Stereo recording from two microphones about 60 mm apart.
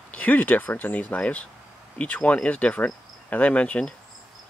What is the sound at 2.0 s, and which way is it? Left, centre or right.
Cricket, left.